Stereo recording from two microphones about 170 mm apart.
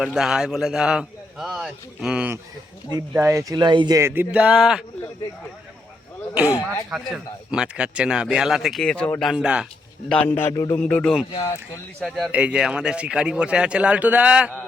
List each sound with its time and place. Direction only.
0.0 s a man's voice: centre (ahead or behind)
2.9 s speech: 20° right (ahead or behind)
6.9 s a man's voice: 5° right (ahead or behind)
9.3 s a man's voice: 5° right (ahead or behind)
10.1 s a man's voice: 10° left (ahead or behind)
10.5 s music: 20° left (ahead or behind)
10.8 s a man's voice: 5° left (ahead or behind)